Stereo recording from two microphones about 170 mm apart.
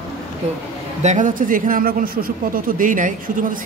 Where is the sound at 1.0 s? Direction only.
45° right (ahead or behind).